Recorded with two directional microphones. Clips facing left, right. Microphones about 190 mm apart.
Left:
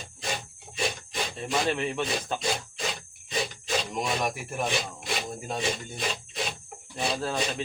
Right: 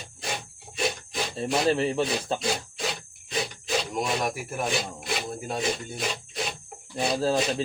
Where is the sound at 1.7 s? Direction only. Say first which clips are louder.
Right 4 dB; 30° right (ahead or behind).